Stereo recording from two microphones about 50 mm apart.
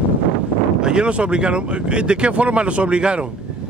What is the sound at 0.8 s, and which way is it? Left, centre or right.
Speech, centre.